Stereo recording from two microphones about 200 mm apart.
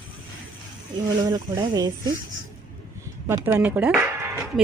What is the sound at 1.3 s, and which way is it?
Speech, 20° right (ahead or behind).